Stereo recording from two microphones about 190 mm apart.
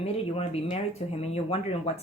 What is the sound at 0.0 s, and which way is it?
Speech, 35° left (ahead or behind).